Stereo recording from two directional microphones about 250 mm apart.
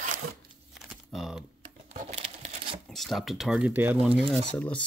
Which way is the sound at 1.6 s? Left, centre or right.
Right.